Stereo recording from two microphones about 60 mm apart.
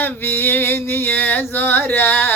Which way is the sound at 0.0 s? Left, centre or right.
Left.